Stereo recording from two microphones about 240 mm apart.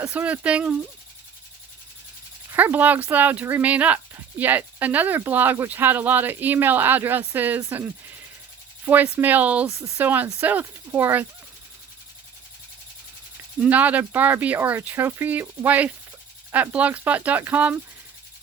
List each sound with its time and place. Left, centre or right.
0.0 s speech: centre
2.5 s speech: centre
13.6 s speech: centre